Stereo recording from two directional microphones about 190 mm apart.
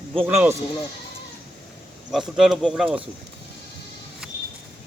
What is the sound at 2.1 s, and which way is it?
Speech, centre (ahead or behind).